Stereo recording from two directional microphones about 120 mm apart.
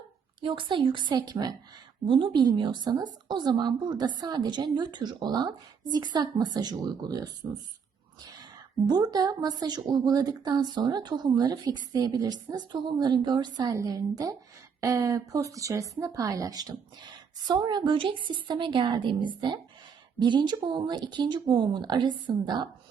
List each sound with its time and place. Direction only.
0.4 s speech: 45° right (ahead or behind)
8.9 s speech: 35° right (ahead or behind)